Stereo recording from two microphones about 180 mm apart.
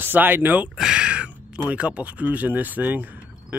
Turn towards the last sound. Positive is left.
turn(degrees=-10)  # may be behind; listen again after turning